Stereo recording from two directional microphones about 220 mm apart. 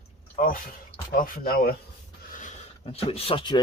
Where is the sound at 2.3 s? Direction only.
30° left (ahead or behind).